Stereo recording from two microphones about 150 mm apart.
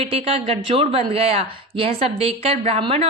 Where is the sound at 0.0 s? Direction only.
40° right (ahead or behind).